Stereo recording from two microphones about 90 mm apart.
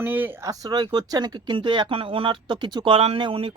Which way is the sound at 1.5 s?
65° right (ahead or behind).